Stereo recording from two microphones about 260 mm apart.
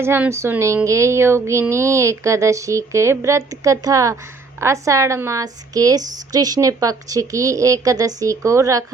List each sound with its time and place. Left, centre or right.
0.0 s speech: centre